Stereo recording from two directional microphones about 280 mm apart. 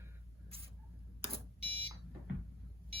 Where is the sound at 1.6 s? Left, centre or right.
Centre.